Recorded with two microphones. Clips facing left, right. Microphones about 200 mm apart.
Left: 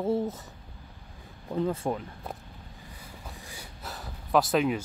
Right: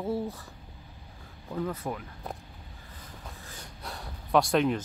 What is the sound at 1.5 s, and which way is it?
Speech, 25° left (ahead or behind).